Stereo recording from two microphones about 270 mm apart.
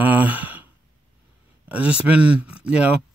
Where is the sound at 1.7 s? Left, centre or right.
Centre.